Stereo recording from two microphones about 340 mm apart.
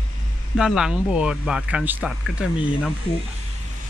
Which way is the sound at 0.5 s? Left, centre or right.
Centre.